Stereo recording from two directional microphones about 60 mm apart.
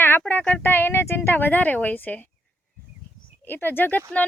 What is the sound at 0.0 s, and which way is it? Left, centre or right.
Child singing, left.